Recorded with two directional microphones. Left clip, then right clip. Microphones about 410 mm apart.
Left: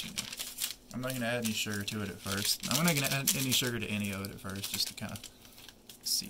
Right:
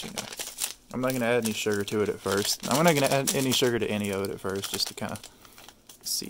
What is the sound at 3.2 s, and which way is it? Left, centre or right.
Speech, centre.